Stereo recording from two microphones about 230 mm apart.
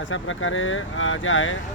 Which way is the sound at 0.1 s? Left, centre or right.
Left.